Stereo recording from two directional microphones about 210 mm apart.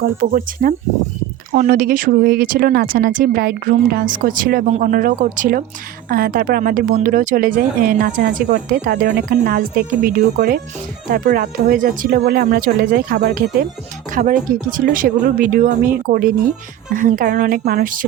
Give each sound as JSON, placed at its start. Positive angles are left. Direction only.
{"t": 0.0, "sound": "a woman's voice", "side_deg": -40}